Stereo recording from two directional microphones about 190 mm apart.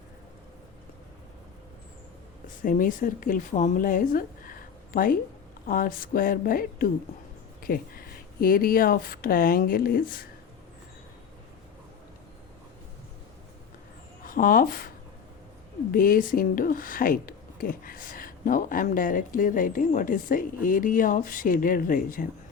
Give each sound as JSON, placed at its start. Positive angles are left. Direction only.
{"t": 2.6, "sound": "a woman's voice", "side_deg": 45}
{"t": 14.3, "sound": "speech", "side_deg": 45}
{"t": 15.9, "sound": "speech", "side_deg": 45}